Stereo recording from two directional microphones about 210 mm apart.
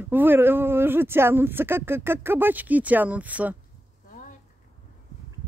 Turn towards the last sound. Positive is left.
turn(degrees=-5)  # may be behind; listen again after turning